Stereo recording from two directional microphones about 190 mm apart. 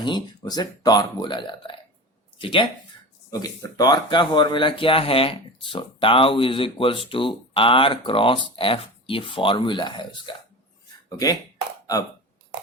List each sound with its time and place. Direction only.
0.0 s speech: 20° left (ahead or behind)